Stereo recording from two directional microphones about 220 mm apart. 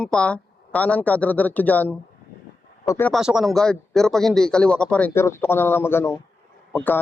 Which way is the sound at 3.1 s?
Centre (ahead or behind).